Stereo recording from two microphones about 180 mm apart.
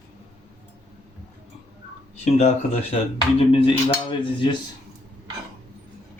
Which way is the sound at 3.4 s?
30° left (ahead or behind).